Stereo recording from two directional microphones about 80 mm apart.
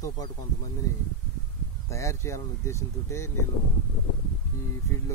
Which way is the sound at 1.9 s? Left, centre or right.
Left.